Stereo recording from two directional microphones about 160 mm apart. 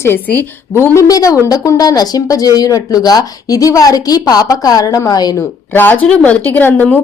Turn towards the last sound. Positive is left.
turn(degrees=10)  # may be behind; listen again after turning